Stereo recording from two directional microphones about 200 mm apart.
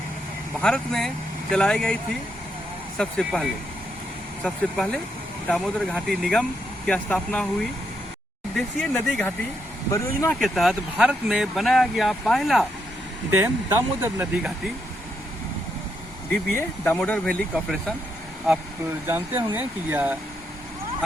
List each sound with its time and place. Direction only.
0.6 s speech: centre (ahead or behind)
8.5 s speech: centre (ahead or behind)
9.9 s speech: 15° left (ahead or behind)
10.4 s speech: centre (ahead or behind)
13.3 s speech: 10° right (ahead or behind)
16.3 s speech: 10° left (ahead or behind)
19.0 s speech: 10° right (ahead or behind)